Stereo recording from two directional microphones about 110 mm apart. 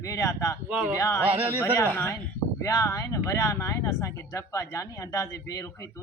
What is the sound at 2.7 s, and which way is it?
Speech, 30° left (ahead or behind).